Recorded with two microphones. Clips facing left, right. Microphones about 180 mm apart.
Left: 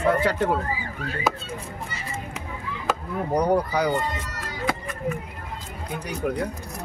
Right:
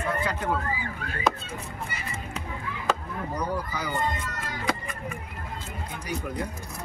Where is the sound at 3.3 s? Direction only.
65° left (ahead or behind).